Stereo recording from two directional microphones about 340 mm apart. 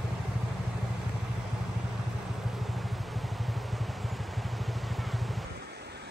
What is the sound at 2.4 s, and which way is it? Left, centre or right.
Vehicle, centre.